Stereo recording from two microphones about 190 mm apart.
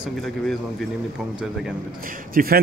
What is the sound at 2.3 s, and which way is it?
Speech, 50° right (ahead or behind).